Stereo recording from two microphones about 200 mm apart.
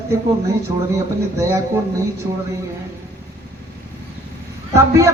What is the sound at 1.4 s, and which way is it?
Speech, 15° right (ahead or behind).